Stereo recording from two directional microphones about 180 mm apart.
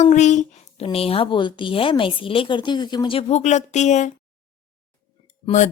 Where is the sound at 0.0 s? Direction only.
40° left (ahead or behind).